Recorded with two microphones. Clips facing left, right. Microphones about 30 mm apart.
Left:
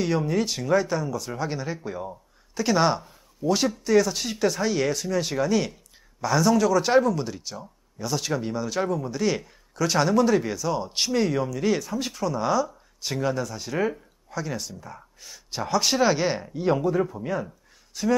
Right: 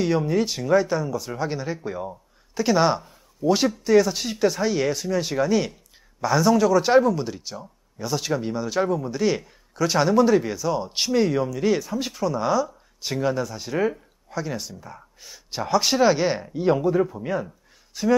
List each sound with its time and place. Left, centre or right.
0.0 s speech: centre